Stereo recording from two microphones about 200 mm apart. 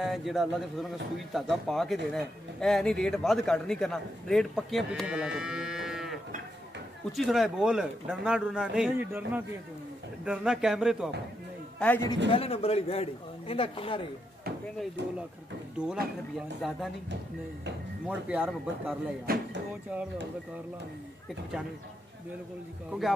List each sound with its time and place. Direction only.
0.0 s a man's voice: centre (ahead or behind)
11.8 s a man's voice: 10° left (ahead or behind)
12.3 s speech: 30° left (ahead or behind)
16.3 s a man's voice: centre (ahead or behind)
18.0 s a man's voice: 5° right (ahead or behind)
22.8 s a man's voice: centre (ahead or behind)